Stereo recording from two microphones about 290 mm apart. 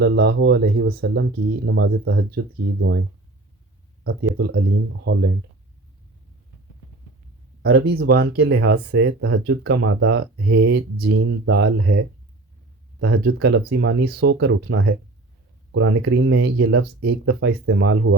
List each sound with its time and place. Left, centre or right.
0.0 s speech: right
4.0 s speech: right
7.6 s speech: right
13.0 s speech: right